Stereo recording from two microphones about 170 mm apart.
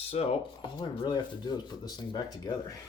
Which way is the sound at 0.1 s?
35° left (ahead or behind).